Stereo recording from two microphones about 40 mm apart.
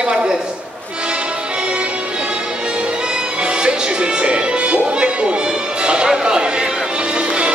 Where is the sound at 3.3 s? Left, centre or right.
Right.